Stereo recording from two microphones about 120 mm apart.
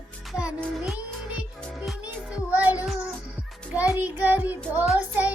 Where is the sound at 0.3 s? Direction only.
10° right (ahead or behind).